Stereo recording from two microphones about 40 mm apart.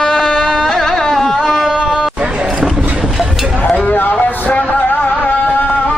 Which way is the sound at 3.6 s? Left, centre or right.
Left.